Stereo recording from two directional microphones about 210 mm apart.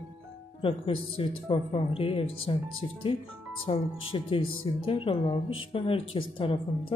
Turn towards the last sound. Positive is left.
turn(degrees=25)  # may be behind; listen again after turning